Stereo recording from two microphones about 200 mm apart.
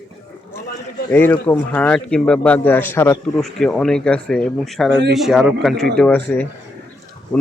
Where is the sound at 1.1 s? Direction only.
10° left (ahead or behind).